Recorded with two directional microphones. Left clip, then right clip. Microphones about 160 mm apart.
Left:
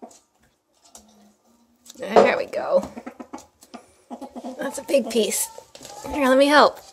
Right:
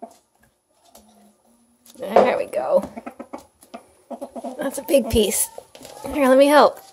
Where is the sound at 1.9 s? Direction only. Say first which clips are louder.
Even; centre (ahead or behind).